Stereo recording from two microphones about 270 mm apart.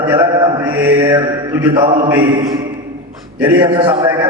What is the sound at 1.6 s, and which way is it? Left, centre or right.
Speech, centre.